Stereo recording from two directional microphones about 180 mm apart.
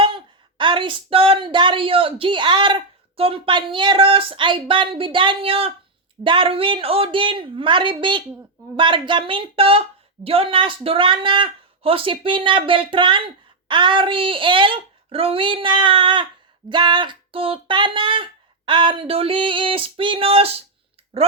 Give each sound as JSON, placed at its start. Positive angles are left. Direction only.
{"t": 0.0, "sound": "a woman's voice", "side_deg": -25}